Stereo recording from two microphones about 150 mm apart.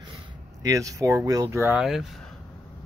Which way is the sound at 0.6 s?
20° right (ahead or behind).